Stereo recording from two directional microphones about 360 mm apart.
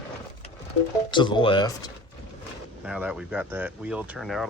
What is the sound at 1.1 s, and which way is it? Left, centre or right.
Speech, centre.